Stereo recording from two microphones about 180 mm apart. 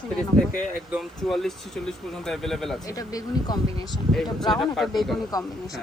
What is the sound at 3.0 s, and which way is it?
Speech, 20° left (ahead or behind).